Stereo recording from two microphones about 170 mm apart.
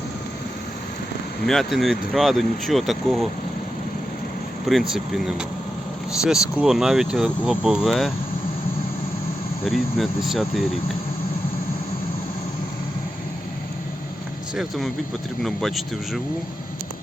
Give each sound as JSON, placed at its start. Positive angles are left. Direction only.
{"t": 1.5, "sound": "speech", "side_deg": 0}
{"t": 4.9, "sound": "speech", "side_deg": 0}
{"t": 9.6, "sound": "speech", "side_deg": 0}
{"t": 14.5, "sound": "speech", "side_deg": 0}